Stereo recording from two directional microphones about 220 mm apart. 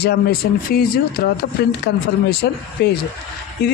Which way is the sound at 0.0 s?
45° left (ahead or behind).